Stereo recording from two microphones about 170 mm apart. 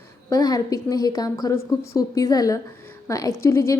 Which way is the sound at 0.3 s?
20° left (ahead or behind).